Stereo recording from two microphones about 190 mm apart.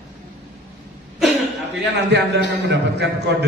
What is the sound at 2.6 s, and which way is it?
Speech, 65° right (ahead or behind).